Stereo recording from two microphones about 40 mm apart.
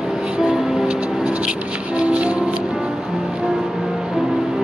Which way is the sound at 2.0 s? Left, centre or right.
Right.